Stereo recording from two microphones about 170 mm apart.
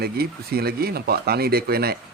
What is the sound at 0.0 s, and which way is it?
Speech, 65° right (ahead or behind).